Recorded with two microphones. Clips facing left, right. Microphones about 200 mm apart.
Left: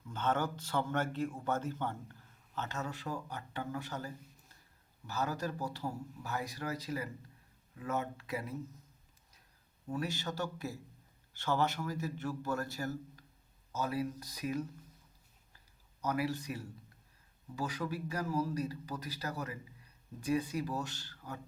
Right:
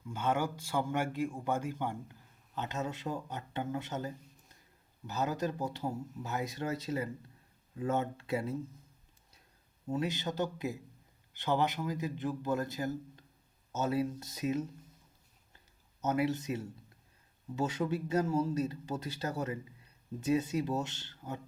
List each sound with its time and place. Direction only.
0.1 s a man's voice: 10° right (ahead or behind); by 8.5 s 25° right (ahead or behind)
9.9 s a man's voice: 20° right (ahead or behind)
15.5 s a sound: 25° right (ahead or behind)
17.5 s speech: 25° right (ahead or behind)